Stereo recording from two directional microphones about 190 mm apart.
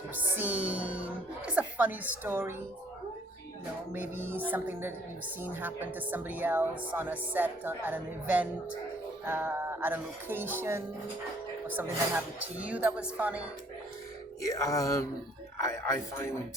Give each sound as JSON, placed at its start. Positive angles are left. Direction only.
{"t": 0.1, "sound": "a woman's voice", "side_deg": -10}
{"t": 4.1, "sound": "speech", "side_deg": -10}
{"t": 14.4, "sound": "speech", "side_deg": 15}